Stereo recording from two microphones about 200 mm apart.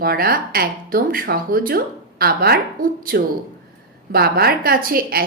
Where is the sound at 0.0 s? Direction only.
50° right (ahead or behind).